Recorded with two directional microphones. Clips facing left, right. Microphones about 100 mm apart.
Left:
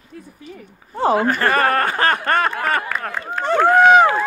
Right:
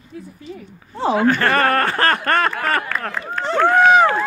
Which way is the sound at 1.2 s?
35° left (ahead or behind).